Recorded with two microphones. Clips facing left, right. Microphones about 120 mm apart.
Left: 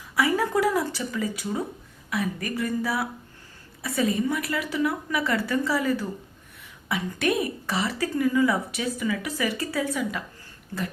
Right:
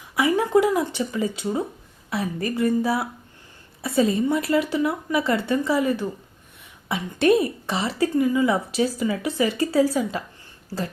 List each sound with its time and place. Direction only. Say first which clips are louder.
0.2 s a woman's voice: right 4 dB; 20° right (ahead or behind)